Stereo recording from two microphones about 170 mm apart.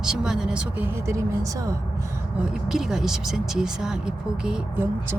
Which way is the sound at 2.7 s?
5° right (ahead or behind).